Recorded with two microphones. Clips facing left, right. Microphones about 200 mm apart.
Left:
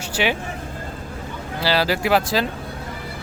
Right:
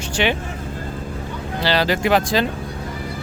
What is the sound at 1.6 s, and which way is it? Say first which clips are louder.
Speech: right 1 dB; 5° left (ahead or behind).